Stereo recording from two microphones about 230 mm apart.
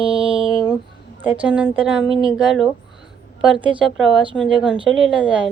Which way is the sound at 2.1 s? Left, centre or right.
Right.